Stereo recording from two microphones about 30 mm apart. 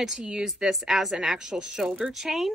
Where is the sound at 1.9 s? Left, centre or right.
Right.